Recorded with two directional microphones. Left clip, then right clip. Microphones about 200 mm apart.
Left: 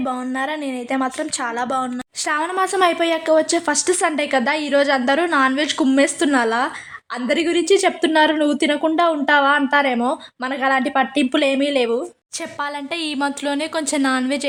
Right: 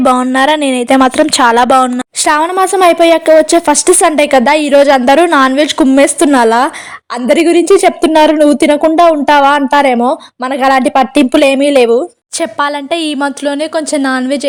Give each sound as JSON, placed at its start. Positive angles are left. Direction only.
{"t": 0.0, "sound": "a woman's voice", "side_deg": -50}